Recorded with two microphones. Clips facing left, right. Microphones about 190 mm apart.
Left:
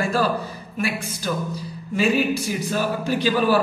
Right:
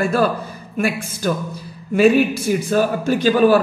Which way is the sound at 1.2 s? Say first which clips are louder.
Right 6 dB; 55° right (ahead or behind).